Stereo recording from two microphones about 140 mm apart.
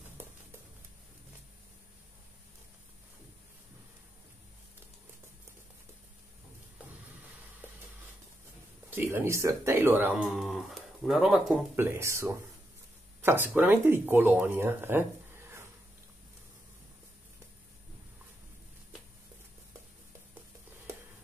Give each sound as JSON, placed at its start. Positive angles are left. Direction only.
{"t": 8.9, "sound": "speech", "side_deg": -15}
{"t": 11.7, "sound": "speech", "side_deg": -20}